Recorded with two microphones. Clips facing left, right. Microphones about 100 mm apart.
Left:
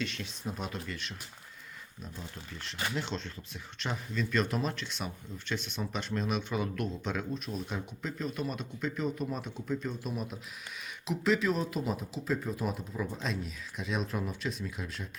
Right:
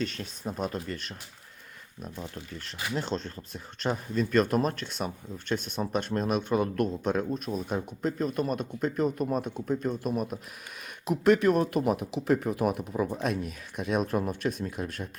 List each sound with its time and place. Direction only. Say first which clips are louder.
0.0 s speech: right 4 dB; 40° right (ahead or behind)